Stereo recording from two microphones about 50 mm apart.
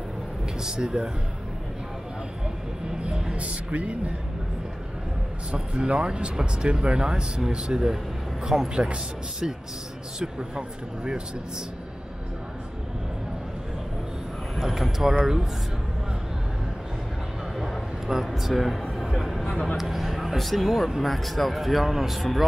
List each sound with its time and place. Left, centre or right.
0.7 s speech: centre
3.0 s a sound: centre
3.3 s speech: right
5.5 s speech: centre
8.5 s speech: centre
10.1 s speech: centre
14.6 s speech: centre
17.6 s a sound: centre
19.4 s speech: centre